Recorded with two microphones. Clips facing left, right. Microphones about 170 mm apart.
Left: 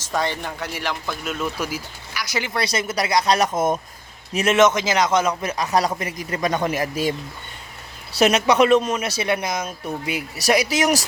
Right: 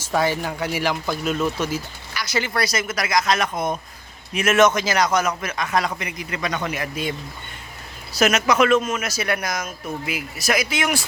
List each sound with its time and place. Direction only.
0.0 s speech: 5° right (ahead or behind)
1.7 s speech: 15° left (ahead or behind)
2.6 s a man's voice: 30° left (ahead or behind)
4.5 s speech: 20° left (ahead or behind)
5.4 s a man's voice: 35° left (ahead or behind)
8.2 s a man's voice: 30° left (ahead or behind)